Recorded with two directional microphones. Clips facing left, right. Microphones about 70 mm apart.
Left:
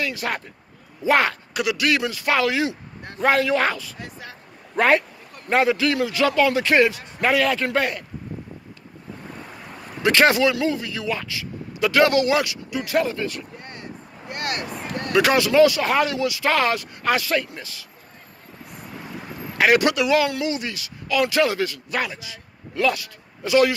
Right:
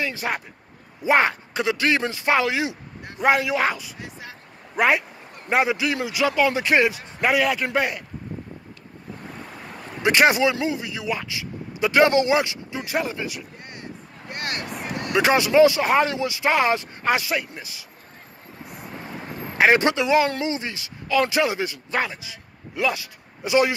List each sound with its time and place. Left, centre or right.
0.0 s a man's voice: right
10.0 s speech: centre
14.3 s speech: right
19.5 s a man's voice: right